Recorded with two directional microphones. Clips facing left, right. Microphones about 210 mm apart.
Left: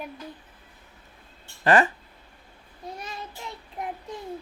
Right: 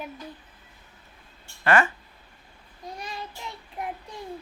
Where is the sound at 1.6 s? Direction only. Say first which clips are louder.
Left 2 dB; 35° left (ahead or behind).